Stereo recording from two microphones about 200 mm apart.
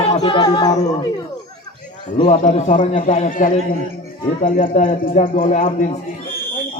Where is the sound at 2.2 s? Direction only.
35° left (ahead or behind).